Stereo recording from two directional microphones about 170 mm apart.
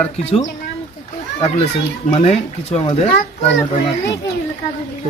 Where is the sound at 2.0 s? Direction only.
40° left (ahead or behind).